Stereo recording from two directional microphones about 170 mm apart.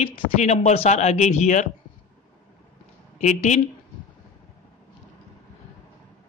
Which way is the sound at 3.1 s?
45° left (ahead or behind).